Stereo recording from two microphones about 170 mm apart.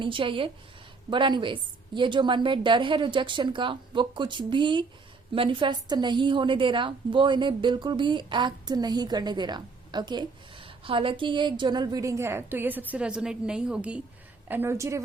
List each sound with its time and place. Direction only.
0.0 s a woman's voice: 30° right (ahead or behind)